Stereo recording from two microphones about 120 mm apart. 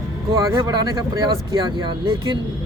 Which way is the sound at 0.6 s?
35° right (ahead or behind).